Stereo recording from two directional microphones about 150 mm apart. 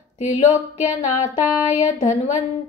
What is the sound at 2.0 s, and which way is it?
Speech, 55° left (ahead or behind).